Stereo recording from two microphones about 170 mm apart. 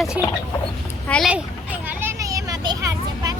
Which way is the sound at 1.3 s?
10° right (ahead or behind).